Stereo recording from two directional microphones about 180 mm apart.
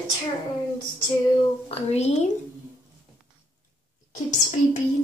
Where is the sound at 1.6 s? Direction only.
35° left (ahead or behind).